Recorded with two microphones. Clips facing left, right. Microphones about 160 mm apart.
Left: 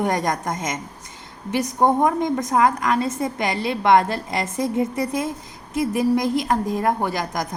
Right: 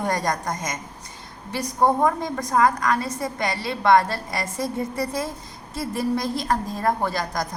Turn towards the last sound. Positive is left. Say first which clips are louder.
# left 1 dB
turn(degrees=20)  # may be behind; listen again after turning